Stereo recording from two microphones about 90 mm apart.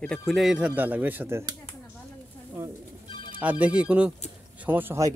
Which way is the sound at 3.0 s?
65° left (ahead or behind).